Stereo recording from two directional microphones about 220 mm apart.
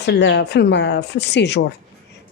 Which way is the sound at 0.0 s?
50° left (ahead or behind).